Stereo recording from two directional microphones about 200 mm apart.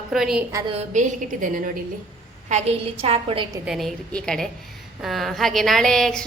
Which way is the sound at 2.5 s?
30° right (ahead or behind).